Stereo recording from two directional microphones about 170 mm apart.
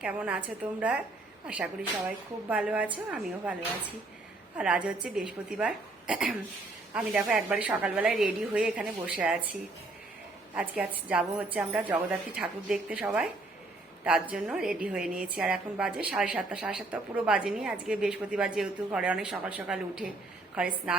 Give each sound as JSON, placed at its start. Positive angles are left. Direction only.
{"t": 0.0, "sound": "a woman's voice", "side_deg": -10}
{"t": 4.5, "sound": "a woman's voice", "side_deg": -10}
{"t": 10.5, "sound": "a woman's voice", "side_deg": -10}